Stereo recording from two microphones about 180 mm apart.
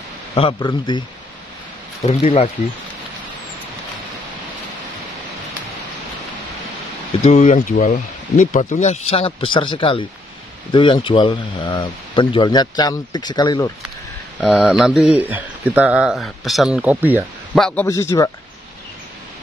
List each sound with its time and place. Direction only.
0.3 s speech: 30° left (ahead or behind)
2.2 s speech: 35° left (ahead or behind)
7.2 s speech: 40° left (ahead or behind); by 13.7 s 25° left (ahead or behind)
14.4 s speech: 5° right (ahead or behind)
17.6 s speech: 5° left (ahead or behind)
17.8 s a man's voice: 15° left (ahead or behind)